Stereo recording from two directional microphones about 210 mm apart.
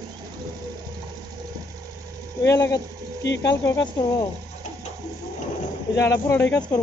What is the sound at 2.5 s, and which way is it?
Speech, 15° left (ahead or behind).